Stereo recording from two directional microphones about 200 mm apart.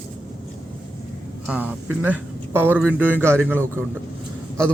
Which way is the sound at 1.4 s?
5° right (ahead or behind).